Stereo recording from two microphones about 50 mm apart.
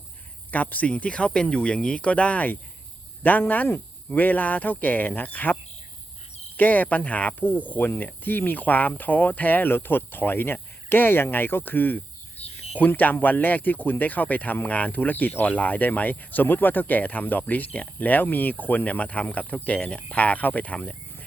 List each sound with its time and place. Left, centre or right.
0.5 s speech: left
6.6 s speech: left